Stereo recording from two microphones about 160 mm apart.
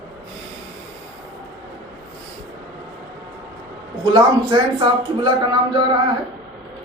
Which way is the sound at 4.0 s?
25° right (ahead or behind).